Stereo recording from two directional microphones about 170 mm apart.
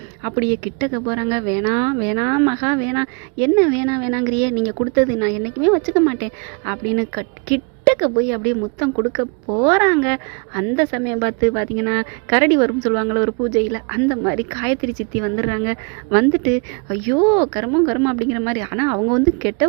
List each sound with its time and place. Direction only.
0.2 s a woman's voice: 20° right (ahead or behind)